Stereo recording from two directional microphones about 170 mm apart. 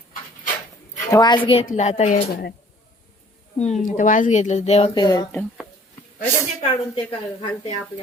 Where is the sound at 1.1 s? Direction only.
25° left (ahead or behind).